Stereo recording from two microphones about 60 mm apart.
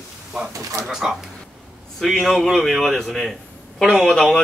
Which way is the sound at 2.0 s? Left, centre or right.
Centre.